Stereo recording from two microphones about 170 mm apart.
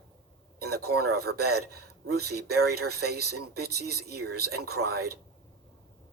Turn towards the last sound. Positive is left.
turn(degrees=-70)  # may be behind; listen again after turning